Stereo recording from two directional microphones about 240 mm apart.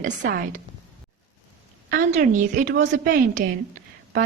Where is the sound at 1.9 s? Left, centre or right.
Right.